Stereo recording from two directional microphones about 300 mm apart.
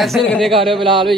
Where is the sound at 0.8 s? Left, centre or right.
Centre.